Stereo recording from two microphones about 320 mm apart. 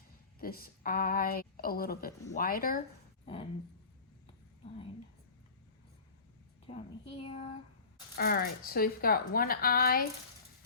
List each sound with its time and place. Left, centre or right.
0.3 s speech: left
6.7 s a woman's voice: centre
8.1 s speech: left